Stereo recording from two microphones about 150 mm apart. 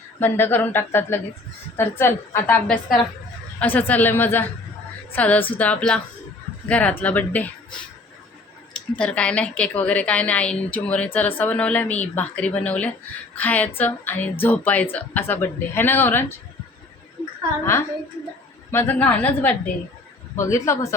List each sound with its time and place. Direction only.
0.2 s a woman's voice: 15° left (ahead or behind)
9.0 s a woman's voice: 10° left (ahead or behind)
17.2 s a sound: 35° left (ahead or behind)
18.7 s a woman's voice: 15° left (ahead or behind)